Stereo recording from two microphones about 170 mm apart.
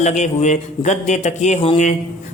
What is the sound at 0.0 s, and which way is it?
A woman's voice, 45° left (ahead or behind).